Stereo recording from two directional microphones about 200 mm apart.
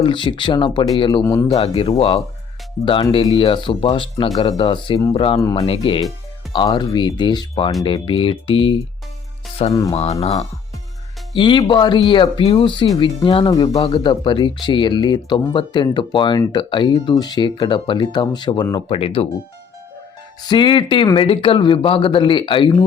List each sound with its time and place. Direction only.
0.0 s speech: 25° left (ahead or behind)
1.5 s speech: 30° left (ahead or behind)
5.4 s speech: 15° left (ahead or behind)
5.6 s speech: 25° left (ahead or behind)
9.9 s speech: 30° left (ahead or behind)
20.4 s speech: 20° left (ahead or behind)